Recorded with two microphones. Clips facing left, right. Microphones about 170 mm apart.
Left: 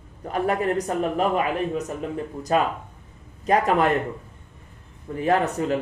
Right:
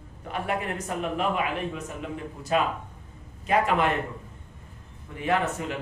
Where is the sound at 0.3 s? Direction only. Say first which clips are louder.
Left 7 dB; 40° left (ahead or behind).